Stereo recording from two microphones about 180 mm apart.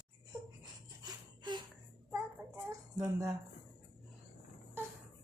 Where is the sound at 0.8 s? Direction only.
25° right (ahead or behind).